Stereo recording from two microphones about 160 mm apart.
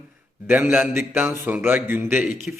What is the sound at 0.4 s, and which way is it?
A man's voice, 15° right (ahead or behind).